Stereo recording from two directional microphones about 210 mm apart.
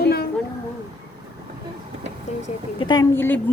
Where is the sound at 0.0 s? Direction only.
50° left (ahead or behind).